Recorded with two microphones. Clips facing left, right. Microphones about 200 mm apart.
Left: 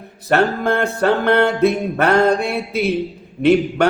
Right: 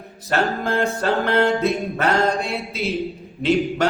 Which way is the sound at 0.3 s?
60° left (ahead or behind).